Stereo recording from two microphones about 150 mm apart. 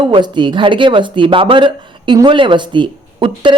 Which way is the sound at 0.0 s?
30° right (ahead or behind).